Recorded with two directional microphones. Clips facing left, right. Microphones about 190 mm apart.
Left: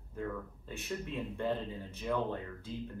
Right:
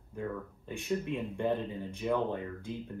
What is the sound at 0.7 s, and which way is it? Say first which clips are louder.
Speech: right 7 dB; 15° right (ahead or behind).